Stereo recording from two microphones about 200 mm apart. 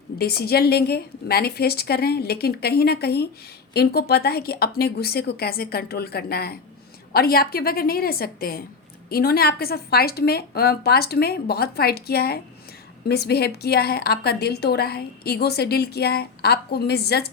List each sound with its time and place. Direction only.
0.2 s a woman's voice: 50° left (ahead or behind)